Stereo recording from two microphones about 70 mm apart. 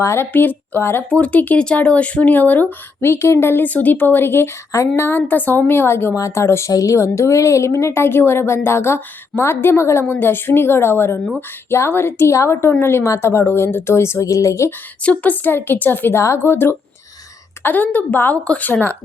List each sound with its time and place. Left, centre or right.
0.0 s a woman's voice: left
0.3 s speech: left
1.1 s a woman's voice: centre
6.1 s a woman's voice: left
6.7 s a woman's voice: left
14.3 s speech: left
15.0 s a woman's voice: left